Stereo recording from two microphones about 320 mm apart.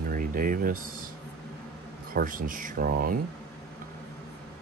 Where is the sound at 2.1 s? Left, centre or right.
Right.